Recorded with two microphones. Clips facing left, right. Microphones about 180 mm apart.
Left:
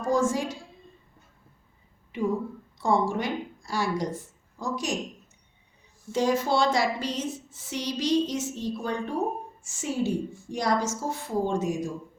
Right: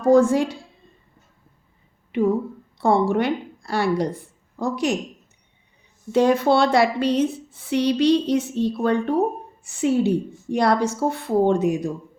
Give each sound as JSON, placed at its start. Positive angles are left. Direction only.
{"t": 0.0, "sound": "a woman's voice", "side_deg": -60}
{"t": 2.1, "sound": "a woman's voice", "side_deg": -65}
{"t": 6.1, "sound": "a woman's voice", "side_deg": -60}